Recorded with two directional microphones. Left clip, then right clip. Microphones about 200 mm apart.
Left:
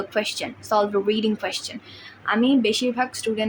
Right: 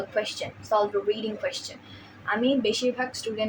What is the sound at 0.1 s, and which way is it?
Speech, 45° left (ahead or behind).